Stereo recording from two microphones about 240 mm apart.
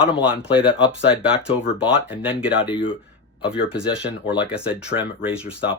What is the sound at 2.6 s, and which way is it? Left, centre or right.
Speech, centre.